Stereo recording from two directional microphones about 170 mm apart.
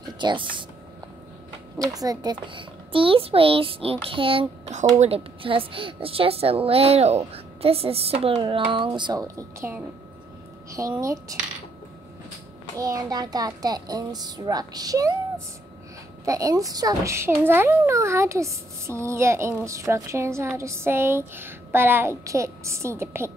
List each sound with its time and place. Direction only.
0.2 s speech: 30° right (ahead or behind)
1.8 s a child's voice: 20° right (ahead or behind)
9.2 s a child's voice: 15° right (ahead or behind)
10.8 s a child's voice: 20° right (ahead or behind)
12.7 s a child's voice: 20° right (ahead or behind)